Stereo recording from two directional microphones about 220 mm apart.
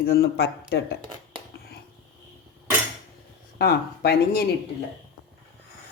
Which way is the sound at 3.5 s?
45° left (ahead or behind).